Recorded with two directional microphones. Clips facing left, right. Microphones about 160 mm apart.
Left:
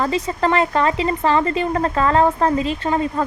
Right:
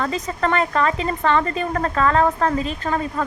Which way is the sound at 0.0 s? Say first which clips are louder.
Left 3 dB; 30° left (ahead or behind).